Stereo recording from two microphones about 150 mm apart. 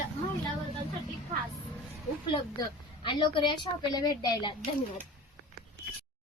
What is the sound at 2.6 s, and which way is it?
A woman's voice, 30° left (ahead or behind).